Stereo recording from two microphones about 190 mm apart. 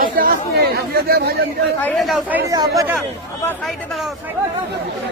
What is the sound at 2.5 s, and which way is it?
Speech, 20° right (ahead or behind).